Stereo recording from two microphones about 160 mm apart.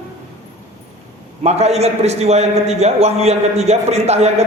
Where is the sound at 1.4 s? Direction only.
40° right (ahead or behind).